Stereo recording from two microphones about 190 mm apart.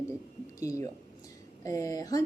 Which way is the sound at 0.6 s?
15° left (ahead or behind).